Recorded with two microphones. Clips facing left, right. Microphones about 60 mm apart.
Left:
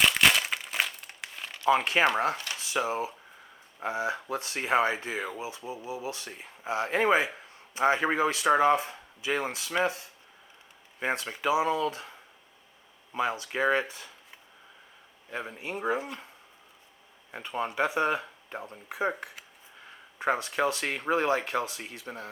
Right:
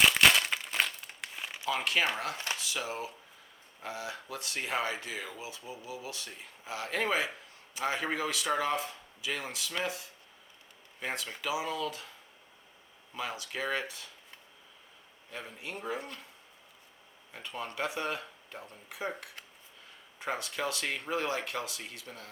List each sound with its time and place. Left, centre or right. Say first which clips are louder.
0.0 s crumpling: even; centre
1.6 s speech: left 7 dB; left
11.0 s speech: left 7 dB; left
13.1 s speech: left 8 dB; left
15.3 s speech: left 6 dB; left
17.3 s speech: left 7 dB; left